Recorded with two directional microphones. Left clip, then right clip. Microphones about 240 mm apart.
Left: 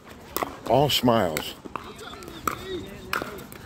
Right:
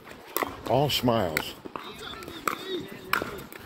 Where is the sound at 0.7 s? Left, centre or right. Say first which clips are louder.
Left 4 dB; left.